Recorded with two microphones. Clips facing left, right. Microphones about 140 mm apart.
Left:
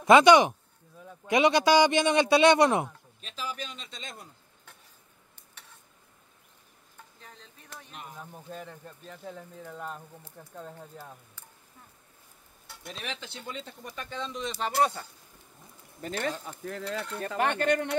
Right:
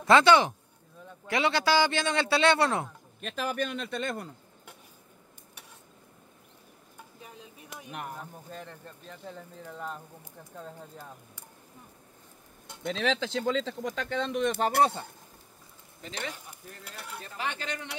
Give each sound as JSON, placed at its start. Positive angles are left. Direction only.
{"t": 0.0, "sound": "a man's voice", "side_deg": 15}
{"t": 3.2, "sound": "a man's voice", "side_deg": -55}
{"t": 7.2, "sound": "a sound", "side_deg": -10}
{"t": 8.5, "sound": "a man's voice", "side_deg": 5}
{"t": 12.8, "sound": "speech", "side_deg": -90}
{"t": 16.0, "sound": "speech", "side_deg": 45}
{"t": 17.3, "sound": "speech", "side_deg": 55}